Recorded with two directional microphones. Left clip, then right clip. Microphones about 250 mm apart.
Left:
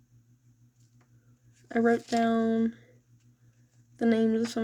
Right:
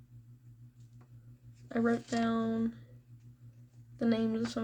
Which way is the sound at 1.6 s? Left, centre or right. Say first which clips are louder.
Left 7 dB; left.